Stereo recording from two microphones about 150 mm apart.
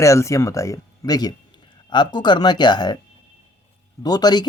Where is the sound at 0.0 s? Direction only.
20° left (ahead or behind).